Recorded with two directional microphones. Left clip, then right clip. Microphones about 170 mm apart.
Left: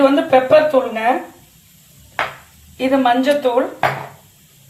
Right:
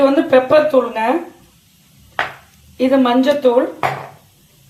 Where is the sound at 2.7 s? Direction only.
30° right (ahead or behind).